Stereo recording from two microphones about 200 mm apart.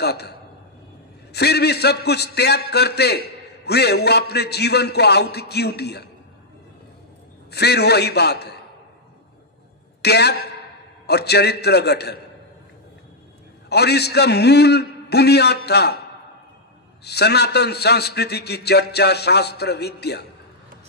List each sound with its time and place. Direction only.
0.0 s a man's voice: 55° left (ahead or behind)
7.5 s a man's voice: 55° left (ahead or behind)
10.0 s a man's voice: 55° left (ahead or behind)
13.7 s a man's voice: 55° left (ahead or behind)
17.0 s a man's voice: 55° left (ahead or behind)